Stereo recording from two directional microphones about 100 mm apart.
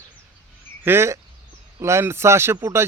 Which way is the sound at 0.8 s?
25° right (ahead or behind).